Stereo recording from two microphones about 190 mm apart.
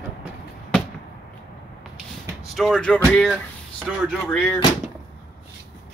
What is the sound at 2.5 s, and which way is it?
Speech, centre (ahead or behind).